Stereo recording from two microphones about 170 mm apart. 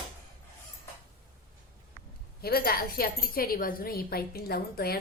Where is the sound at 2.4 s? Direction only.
65° left (ahead or behind).